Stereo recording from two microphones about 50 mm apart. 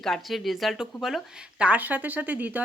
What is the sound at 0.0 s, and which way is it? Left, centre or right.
Speech, centre.